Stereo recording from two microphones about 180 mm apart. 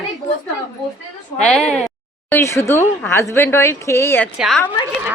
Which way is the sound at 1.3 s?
5° left (ahead or behind).